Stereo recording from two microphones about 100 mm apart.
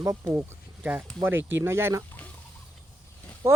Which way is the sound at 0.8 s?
15° right (ahead or behind).